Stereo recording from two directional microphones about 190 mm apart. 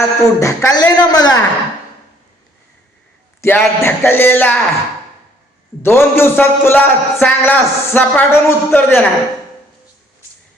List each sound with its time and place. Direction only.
0.0 s speech: 15° left (ahead or behind)
3.4 s a man's voice: 10° left (ahead or behind)
5.8 s a man's voice: 10° left (ahead or behind)